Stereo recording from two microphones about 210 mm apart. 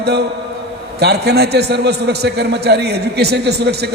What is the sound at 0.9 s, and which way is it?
A man's voice, 50° right (ahead or behind).